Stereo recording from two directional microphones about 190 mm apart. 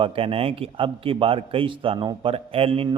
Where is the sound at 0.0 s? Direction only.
30° right (ahead or behind).